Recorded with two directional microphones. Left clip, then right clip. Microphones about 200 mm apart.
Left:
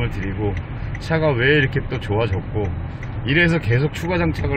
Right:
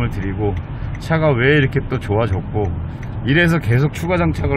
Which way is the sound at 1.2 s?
15° right (ahead or behind).